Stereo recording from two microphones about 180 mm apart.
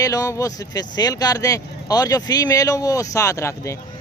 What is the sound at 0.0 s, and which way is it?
Speech, 20° left (ahead or behind).